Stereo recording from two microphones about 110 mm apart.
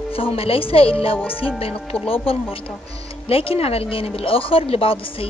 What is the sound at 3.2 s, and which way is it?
Speech, 60° left (ahead or behind).